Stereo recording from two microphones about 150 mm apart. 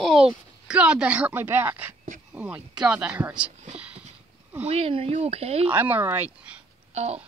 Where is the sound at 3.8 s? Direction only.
10° right (ahead or behind).